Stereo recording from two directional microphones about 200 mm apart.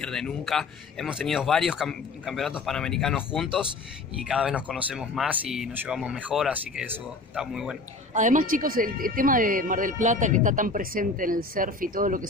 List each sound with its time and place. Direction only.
0.0 s speech: centre (ahead or behind)
8.1 s speech: 40° right (ahead or behind)